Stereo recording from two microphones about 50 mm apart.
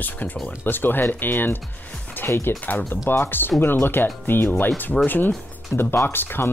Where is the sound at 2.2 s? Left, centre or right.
Left.